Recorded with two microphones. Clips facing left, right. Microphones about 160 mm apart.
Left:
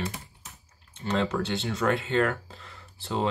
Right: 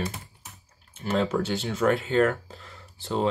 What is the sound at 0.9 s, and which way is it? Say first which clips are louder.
Speech: right 2 dB; 5° right (ahead or behind).